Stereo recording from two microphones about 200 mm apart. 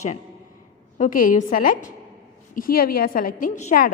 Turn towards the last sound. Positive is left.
turn(degrees=40)  # may be behind; listen again after turning